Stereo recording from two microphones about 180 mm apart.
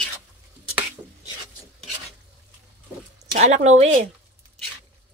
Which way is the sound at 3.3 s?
40° right (ahead or behind).